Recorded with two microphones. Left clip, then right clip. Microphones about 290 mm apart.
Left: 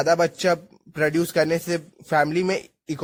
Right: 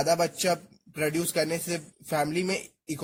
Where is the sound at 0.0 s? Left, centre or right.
Left.